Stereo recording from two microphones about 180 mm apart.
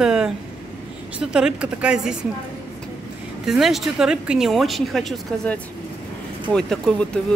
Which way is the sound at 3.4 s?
Centre (ahead or behind).